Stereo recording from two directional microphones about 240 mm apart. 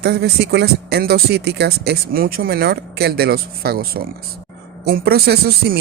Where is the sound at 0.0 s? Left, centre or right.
Right.